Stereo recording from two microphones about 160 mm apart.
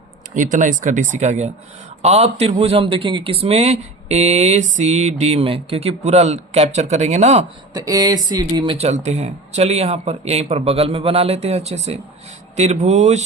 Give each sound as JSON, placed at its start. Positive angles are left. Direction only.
{"t": 0.3, "sound": "a man's voice", "side_deg": -55}
{"t": 7.7, "sound": "a man's voice", "side_deg": -25}